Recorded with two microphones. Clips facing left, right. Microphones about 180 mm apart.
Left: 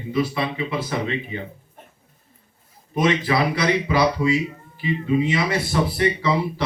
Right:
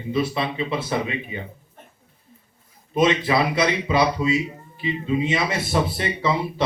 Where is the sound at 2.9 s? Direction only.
20° right (ahead or behind).